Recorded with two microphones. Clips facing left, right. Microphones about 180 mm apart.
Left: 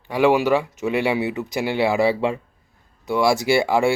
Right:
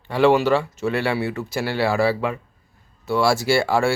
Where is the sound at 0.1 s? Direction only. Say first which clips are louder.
Even; 10° left (ahead or behind).